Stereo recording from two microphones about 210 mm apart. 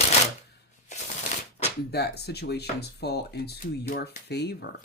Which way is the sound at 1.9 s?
50° left (ahead or behind).